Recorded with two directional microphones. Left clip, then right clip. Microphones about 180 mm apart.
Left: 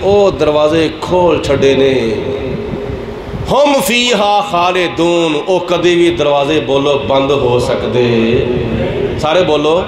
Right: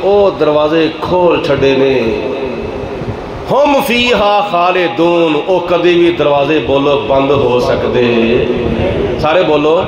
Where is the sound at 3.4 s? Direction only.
20° left (ahead or behind).